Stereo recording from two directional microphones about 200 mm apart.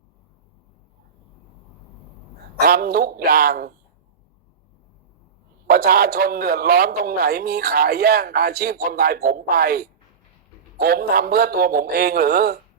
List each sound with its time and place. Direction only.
2.6 s a man's voice: 50° right (ahead or behind)
5.6 s a man's voice: 50° right (ahead or behind)